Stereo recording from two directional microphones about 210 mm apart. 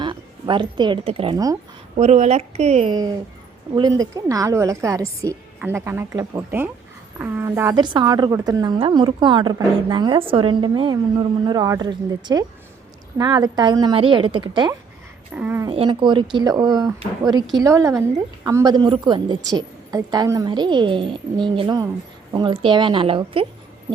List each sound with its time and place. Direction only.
0.0 s a woman's voice: 20° right (ahead or behind)
2.0 s a woman's voice: 35° right (ahead or behind)
15.4 s a woman's voice: 10° right (ahead or behind)
15.7 s a woman's voice: 25° right (ahead or behind)